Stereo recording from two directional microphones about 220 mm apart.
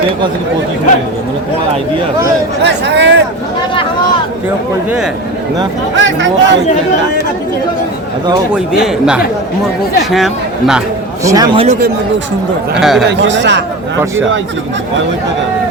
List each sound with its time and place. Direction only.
2.6 s speech: 50° right (ahead or behind)
6.0 s speech: 55° right (ahead or behind)
8.5 s speech: 5° right (ahead or behind)
11.2 s speech: 15° right (ahead or behind)
11.5 s speech: 30° right (ahead or behind)
12.8 s speech: centre (ahead or behind)
13.1 s speech: 55° right (ahead or behind)